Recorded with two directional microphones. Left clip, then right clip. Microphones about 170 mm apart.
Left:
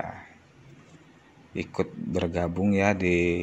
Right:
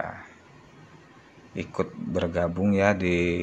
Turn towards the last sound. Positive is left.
turn(degrees=20)  # may be behind; listen again after turning